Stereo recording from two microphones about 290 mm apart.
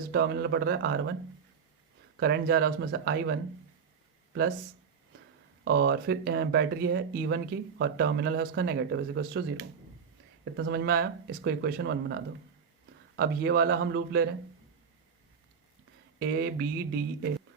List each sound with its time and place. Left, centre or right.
0.1 s speech: right
2.1 s speech: right
5.6 s speech: right
10.6 s speech: right
16.1 s speech: right